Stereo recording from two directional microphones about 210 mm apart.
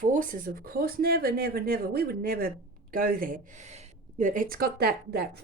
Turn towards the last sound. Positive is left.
turn(degrees=-50)  # may be behind; listen again after turning